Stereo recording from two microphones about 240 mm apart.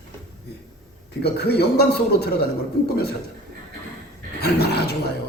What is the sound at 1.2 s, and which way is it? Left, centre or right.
Speech, left.